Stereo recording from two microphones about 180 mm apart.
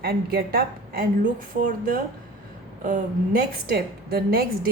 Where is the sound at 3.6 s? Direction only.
60° right (ahead or behind).